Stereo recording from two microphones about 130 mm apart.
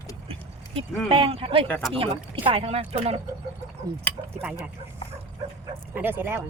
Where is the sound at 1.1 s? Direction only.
45° right (ahead or behind).